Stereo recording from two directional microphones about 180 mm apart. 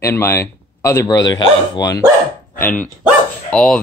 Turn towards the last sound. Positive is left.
turn(degrees=5)  # may be behind; listen again after turning